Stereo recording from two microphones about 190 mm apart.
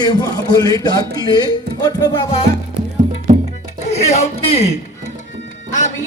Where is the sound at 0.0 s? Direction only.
20° left (ahead or behind).